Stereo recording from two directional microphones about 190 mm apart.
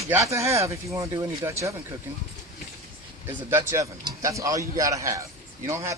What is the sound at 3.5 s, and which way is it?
Speech, 15° right (ahead or behind).